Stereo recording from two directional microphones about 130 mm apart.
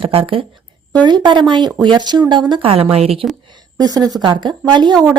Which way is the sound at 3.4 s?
30° right (ahead or behind).